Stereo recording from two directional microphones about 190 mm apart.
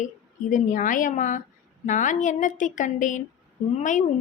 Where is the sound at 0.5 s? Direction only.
45° left (ahead or behind).